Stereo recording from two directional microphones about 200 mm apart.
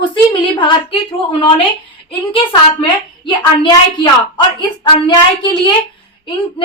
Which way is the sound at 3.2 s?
25° left (ahead or behind).